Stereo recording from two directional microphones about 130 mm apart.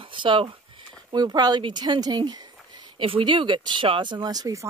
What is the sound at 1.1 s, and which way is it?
Speech, 30° right (ahead or behind).